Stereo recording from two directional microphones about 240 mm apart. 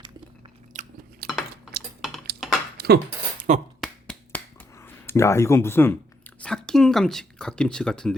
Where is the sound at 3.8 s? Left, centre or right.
Centre.